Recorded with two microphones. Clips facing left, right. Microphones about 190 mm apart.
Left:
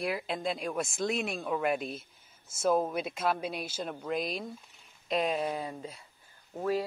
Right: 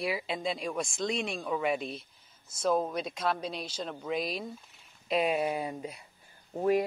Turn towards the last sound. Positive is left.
turn(degrees=-20)  # may be behind; listen again after turning